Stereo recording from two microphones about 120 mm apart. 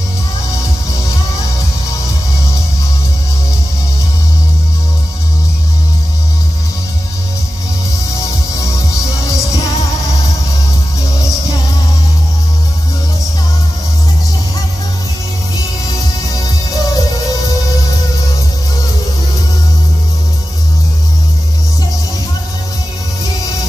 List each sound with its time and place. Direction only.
16.3 s music: 30° left (ahead or behind)